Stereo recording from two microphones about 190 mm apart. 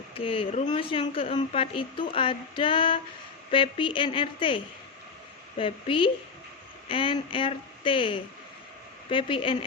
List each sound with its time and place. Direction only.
0.1 s a woman's voice: 30° left (ahead or behind)